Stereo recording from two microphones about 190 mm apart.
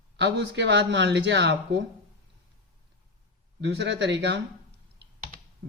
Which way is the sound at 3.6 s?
65° right (ahead or behind).